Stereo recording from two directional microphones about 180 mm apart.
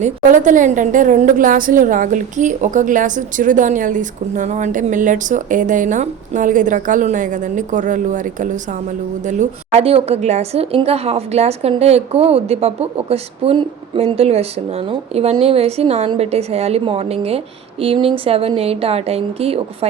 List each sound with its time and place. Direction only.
0.0 s a woman's voice: 45° right (ahead or behind)